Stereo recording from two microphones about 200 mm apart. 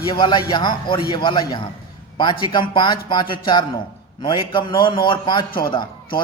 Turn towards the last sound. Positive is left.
turn(degrees=25)  # may be behind; listen again after turning